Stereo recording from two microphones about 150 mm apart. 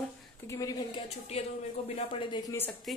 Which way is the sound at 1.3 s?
40° left (ahead or behind).